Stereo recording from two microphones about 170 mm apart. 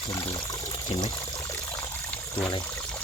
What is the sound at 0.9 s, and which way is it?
Speech, 35° left (ahead or behind).